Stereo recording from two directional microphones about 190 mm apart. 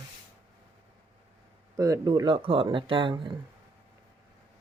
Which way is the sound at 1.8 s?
20° right (ahead or behind).